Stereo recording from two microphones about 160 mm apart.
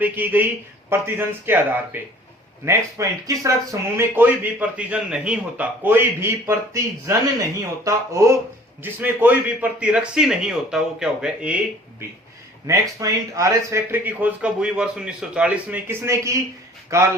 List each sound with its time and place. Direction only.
0.0 s speech: 10° right (ahead or behind)
12.6 s speech: 20° right (ahead or behind)